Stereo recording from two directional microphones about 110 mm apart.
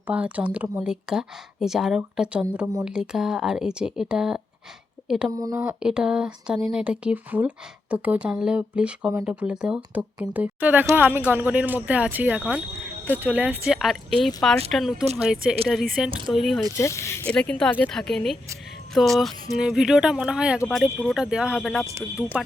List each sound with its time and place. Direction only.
0.1 s speech: 10° right (ahead or behind)
5.3 s speech: 35° right (ahead or behind)
5.5 s speech: 10° right (ahead or behind)
16.7 s speech: 25° left (ahead or behind)
17.2 s speech: 10° left (ahead or behind); by 21.7 s 10° right (ahead or behind)